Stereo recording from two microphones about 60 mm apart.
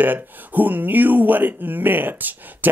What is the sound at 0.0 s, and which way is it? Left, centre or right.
Speech, right.